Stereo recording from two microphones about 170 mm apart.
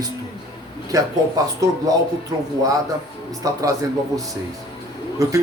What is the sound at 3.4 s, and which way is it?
Speech, 20° right (ahead or behind).